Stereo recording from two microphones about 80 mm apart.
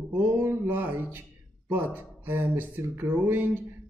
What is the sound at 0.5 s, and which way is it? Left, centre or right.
Speech, right.